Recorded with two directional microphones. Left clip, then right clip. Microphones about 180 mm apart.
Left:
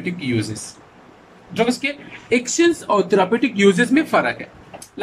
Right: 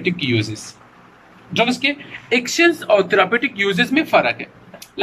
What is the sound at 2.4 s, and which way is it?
A man's voice, 15° left (ahead or behind).